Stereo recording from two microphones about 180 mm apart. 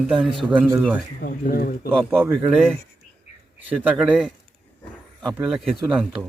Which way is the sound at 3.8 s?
5° right (ahead or behind).